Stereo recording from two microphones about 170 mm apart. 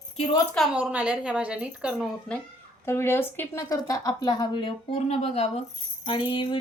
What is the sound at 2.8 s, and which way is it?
Speech, 15° left (ahead or behind).